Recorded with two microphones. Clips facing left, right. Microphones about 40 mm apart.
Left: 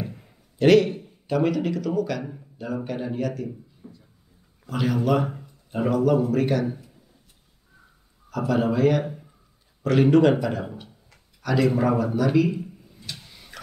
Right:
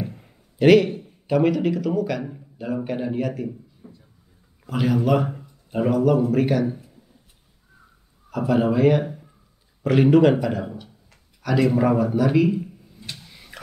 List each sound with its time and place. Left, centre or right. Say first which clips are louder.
0.0 s a man's voice: right 2 dB; centre
3.8 s a sound: left 1 dB; right
4.6 s speech: right 2 dB; centre
8.3 s speech: right 3 dB; centre
9.0 s a sound: right 2 dB; centre
9.8 s a man's voice: right 2 dB; centre
13.3 s vehicle: right 1 dB; centre